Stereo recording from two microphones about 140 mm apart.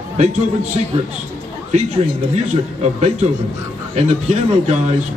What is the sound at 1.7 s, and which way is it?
Speech, 55° right (ahead or behind).